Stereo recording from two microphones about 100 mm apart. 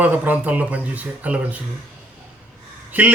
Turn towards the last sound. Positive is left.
turn(degrees=-15)  # may be behind; listen again after turning